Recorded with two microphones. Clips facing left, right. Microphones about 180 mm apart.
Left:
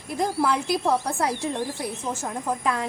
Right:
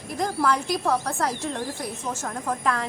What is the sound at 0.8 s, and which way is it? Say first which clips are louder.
Speech: left 1 dB; 20° left (ahead or behind).